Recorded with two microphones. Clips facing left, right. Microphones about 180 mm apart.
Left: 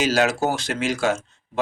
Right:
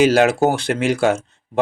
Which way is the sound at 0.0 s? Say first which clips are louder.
Right 6 dB; 60° right (ahead or behind).